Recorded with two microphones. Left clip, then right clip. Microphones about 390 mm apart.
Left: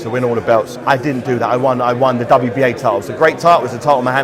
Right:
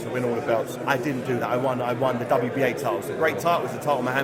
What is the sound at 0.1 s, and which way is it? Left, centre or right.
A man's voice, left.